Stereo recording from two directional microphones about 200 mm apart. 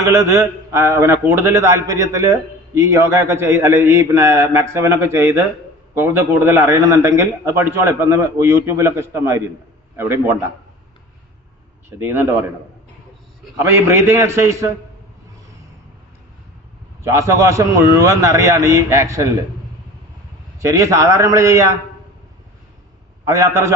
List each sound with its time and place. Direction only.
0.0 s a man's voice: 15° right (ahead or behind)
11.9 s a man's voice: 10° right (ahead or behind)
13.6 s a man's voice: 15° right (ahead or behind)
17.0 s a man's voice: 15° right (ahead or behind)
20.6 s a man's voice: 15° right (ahead or behind)
23.2 s a man's voice: 15° right (ahead or behind)